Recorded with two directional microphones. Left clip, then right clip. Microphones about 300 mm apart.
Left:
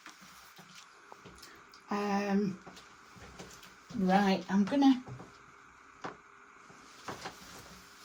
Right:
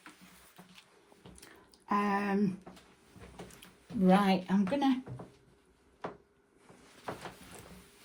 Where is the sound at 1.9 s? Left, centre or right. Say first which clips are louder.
Right 2 dB; right.